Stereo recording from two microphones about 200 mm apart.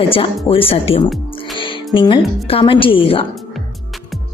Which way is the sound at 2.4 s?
25° left (ahead or behind).